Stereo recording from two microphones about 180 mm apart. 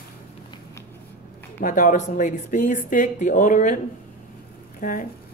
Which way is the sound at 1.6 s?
45° left (ahead or behind).